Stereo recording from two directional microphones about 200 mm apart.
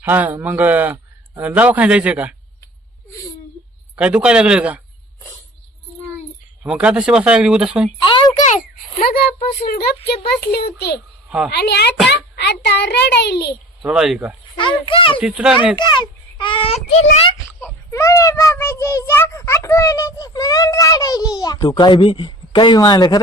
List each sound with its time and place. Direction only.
0.0 s speech: 10° right (ahead or behind)
3.9 s speech: 5° right (ahead or behind)
6.6 s speech: 5° right (ahead or behind)
8.0 s a sound: 25° left (ahead or behind)
9.0 s a child's voice: 50° left (ahead or behind)
11.3 s speech: 5° right (ahead or behind)
11.5 s a child's voice: 55° left (ahead or behind)
13.8 s speech: 5° right (ahead or behind)
14.5 s a child's voice: 25° left (ahead or behind)
15.2 s speech: 5° right (ahead or behind)
16.0 s speech: 25° left (ahead or behind)
17.6 s a child's voice: 15° left (ahead or behind)